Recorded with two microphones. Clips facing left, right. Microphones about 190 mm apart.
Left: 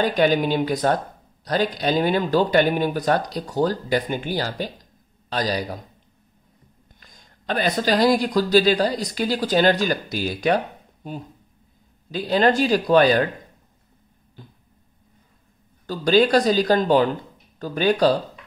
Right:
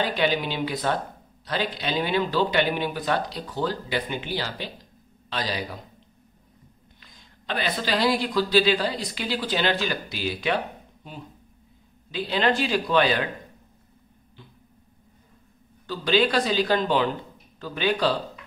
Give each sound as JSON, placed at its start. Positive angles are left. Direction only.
{"t": 0.0, "sound": "speech", "side_deg": 45}
{"t": 7.0, "sound": "speech", "side_deg": 45}
{"t": 12.1, "sound": "speech", "side_deg": 45}
{"t": 15.9, "sound": "speech", "side_deg": 45}